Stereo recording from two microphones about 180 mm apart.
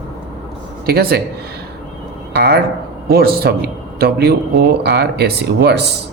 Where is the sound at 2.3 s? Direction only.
65° right (ahead or behind).